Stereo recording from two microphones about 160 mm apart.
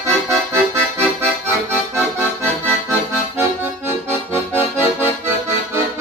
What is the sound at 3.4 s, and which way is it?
Accordion, 15° right (ahead or behind).